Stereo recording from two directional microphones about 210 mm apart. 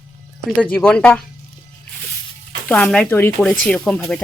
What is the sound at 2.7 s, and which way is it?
Speech, 5° left (ahead or behind).